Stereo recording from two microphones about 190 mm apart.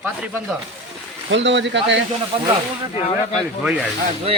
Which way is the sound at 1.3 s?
70° right (ahead or behind).